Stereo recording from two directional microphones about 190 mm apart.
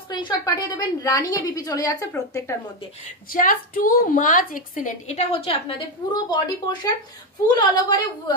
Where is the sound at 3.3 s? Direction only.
45° left (ahead or behind); by 8.3 s 25° left (ahead or behind).